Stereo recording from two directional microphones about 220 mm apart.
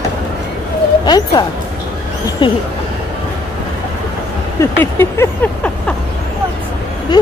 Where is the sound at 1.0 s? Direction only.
20° left (ahead or behind).